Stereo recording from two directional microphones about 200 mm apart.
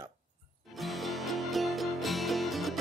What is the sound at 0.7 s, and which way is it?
Music, centre (ahead or behind).